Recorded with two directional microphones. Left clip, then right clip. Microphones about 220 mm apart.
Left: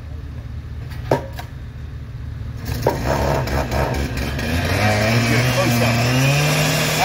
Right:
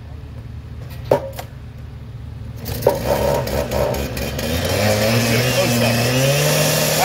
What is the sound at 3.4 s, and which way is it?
Vehicle, 20° right (ahead or behind).